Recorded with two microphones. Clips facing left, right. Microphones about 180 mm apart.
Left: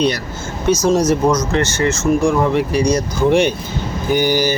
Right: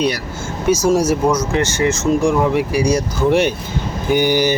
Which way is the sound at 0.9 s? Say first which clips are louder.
Left 1 dB; 10° right (ahead or behind).